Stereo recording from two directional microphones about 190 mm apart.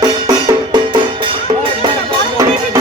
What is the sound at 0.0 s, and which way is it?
Music, 20° right (ahead or behind).